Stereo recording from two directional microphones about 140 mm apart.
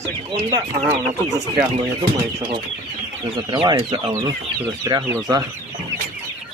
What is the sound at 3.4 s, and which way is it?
Speech, 30° right (ahead or behind).